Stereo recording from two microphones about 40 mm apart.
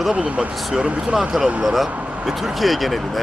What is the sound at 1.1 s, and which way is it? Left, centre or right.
Speech, centre.